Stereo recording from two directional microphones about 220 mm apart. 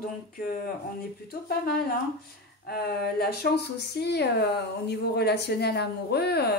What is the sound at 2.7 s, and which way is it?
Speech, 45° left (ahead or behind).